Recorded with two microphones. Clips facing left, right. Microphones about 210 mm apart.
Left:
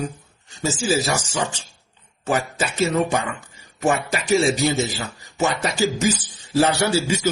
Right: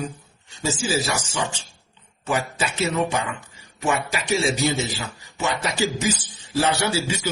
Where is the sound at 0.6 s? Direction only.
40° left (ahead or behind).